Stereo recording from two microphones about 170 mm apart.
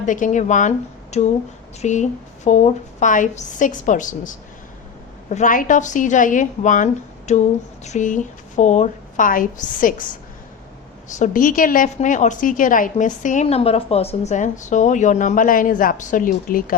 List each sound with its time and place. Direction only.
0.0 s a woman's voice: 50° left (ahead or behind)
11.2 s a woman's voice: 50° left (ahead or behind)